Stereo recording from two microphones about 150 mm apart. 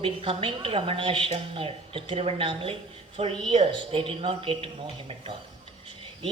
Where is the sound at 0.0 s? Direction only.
40° right (ahead or behind).